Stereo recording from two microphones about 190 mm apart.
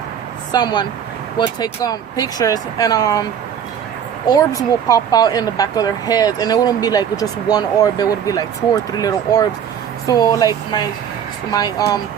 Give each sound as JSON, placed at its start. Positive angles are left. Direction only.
{"t": 0.5, "sound": "speech", "side_deg": 20}
{"t": 4.3, "sound": "speech", "side_deg": 20}